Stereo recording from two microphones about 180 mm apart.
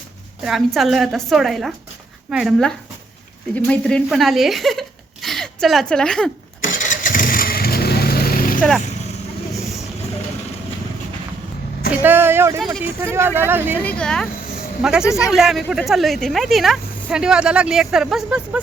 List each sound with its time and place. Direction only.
0.4 s speech: centre (ahead or behind)
6.6 s vehicle: 45° left (ahead or behind)
12.0 s speech: 10° right (ahead or behind)
13.8 s speech: 5° left (ahead or behind)
15.0 s speech: 15° left (ahead or behind)
15.3 s speech: centre (ahead or behind)